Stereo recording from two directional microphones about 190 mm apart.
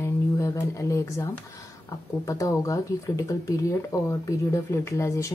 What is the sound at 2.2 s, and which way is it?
Speech, 15° left (ahead or behind).